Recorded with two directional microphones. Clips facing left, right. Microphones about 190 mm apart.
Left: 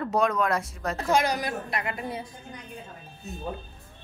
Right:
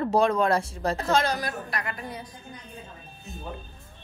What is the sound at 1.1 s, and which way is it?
A woman's voice, 15° left (ahead or behind).